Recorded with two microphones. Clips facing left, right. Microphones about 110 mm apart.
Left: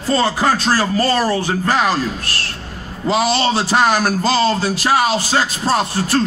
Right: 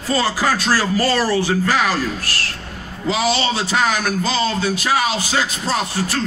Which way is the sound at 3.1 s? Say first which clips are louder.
Left 3 dB; 55° left (ahead or behind).